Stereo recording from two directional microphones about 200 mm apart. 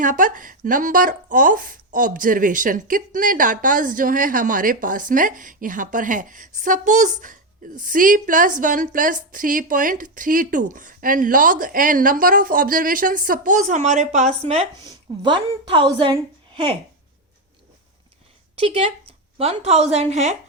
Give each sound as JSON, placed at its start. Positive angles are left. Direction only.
{"t": 0.0, "sound": "speech", "side_deg": -40}
{"t": 14.8, "sound": "a woman's voice", "side_deg": -25}
{"t": 18.5, "sound": "a woman's voice", "side_deg": -30}